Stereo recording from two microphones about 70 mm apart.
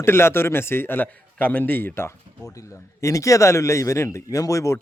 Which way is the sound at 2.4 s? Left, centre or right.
Left.